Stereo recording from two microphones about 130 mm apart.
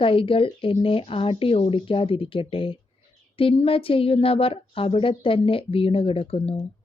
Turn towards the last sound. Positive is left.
turn(degrees=50)  # may be behind; listen again after turning